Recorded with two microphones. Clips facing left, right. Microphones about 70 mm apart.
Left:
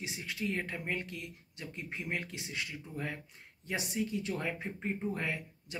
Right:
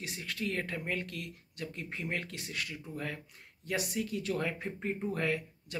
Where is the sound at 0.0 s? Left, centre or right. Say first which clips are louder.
Even; centre.